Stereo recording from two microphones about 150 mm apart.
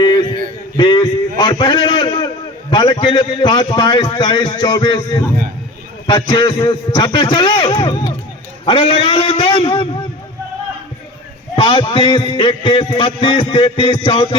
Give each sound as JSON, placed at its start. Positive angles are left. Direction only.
{"t": 0.0, "sound": "a sound", "side_deg": 30}
{"t": 1.4, "sound": "a man's voice", "side_deg": 30}
{"t": 11.5, "sound": "a man's voice", "side_deg": 35}